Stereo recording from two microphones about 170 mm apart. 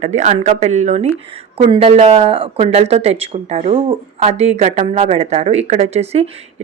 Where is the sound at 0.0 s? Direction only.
45° right (ahead or behind).